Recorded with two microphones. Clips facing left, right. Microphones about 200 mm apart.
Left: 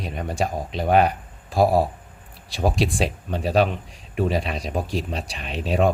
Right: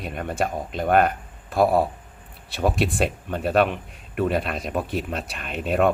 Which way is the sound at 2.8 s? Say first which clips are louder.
Even; centre (ahead or behind).